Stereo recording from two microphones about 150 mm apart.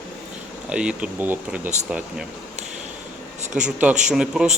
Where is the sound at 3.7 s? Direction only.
10° right (ahead or behind).